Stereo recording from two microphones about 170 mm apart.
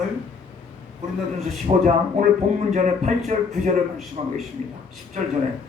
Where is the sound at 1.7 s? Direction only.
35° right (ahead or behind).